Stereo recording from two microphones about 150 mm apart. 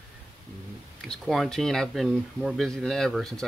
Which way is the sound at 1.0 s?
Centre (ahead or behind).